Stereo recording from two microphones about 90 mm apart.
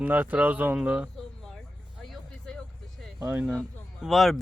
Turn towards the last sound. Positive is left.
turn(degrees=0)  # may be behind; listen again after turning